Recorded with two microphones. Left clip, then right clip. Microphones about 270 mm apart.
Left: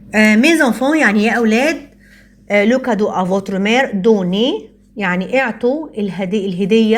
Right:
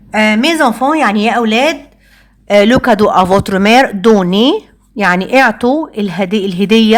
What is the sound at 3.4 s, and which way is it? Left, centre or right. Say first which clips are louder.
Speech: right 7 dB; right.